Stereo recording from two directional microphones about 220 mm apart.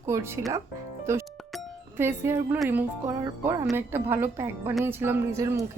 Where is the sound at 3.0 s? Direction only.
15° right (ahead or behind).